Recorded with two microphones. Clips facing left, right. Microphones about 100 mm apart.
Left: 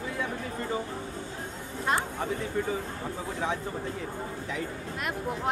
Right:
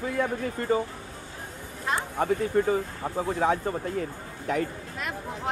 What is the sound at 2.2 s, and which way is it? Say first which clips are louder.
Speech: right 6 dB; 55° right (ahead or behind).